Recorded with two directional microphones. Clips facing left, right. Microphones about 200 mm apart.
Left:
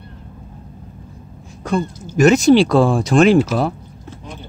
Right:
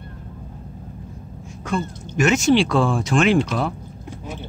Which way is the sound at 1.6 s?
40° left (ahead or behind).